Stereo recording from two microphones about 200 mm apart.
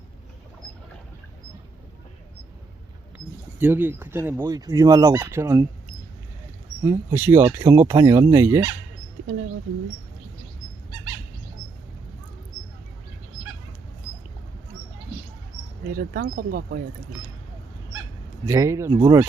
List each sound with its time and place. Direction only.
3.6 s speech: 10° right (ahead or behind)
6.8 s speech: 10° right (ahead or behind)
15.9 s speech: 45° right (ahead or behind)
18.4 s speech: 15° right (ahead or behind)